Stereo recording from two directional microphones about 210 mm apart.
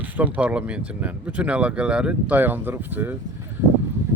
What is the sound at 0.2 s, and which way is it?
Speech, 5° right (ahead or behind).